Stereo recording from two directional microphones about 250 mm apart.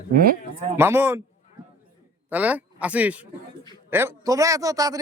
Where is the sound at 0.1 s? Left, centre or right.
Right.